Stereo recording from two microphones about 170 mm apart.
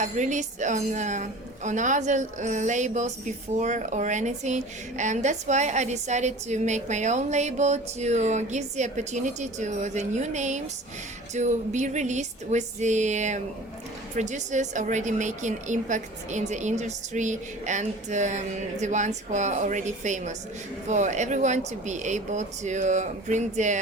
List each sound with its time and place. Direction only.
0.0 s a woman's voice: 45° right (ahead or behind)